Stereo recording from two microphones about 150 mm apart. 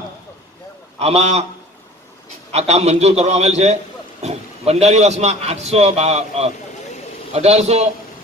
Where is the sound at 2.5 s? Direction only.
45° right (ahead or behind).